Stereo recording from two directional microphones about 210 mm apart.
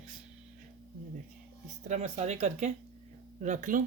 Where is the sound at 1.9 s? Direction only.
30° right (ahead or behind).